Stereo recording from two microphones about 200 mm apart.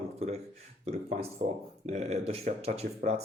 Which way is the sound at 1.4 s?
35° right (ahead or behind).